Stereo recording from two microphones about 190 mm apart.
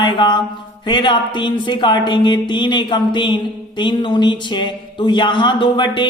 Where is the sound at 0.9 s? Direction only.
25° left (ahead or behind).